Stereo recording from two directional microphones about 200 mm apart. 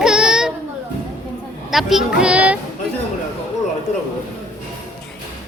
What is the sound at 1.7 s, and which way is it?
Speech, centre (ahead or behind).